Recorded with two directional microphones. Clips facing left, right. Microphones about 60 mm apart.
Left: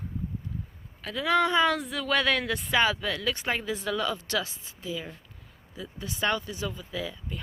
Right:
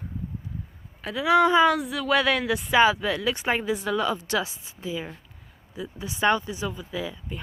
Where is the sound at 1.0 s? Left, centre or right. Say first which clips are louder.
Right 5 dB; centre.